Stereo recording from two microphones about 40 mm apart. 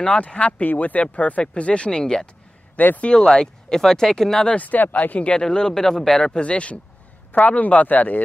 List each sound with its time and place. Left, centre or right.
0.2 s speech: left
0.7 s speech: left
1.4 s speech: left
2.8 s speech: left
3.2 s speech: left
4.6 s speech: left
5.2 s speech: left
5.5 s speech: centre
6.1 s speech: left
7.3 s speech: left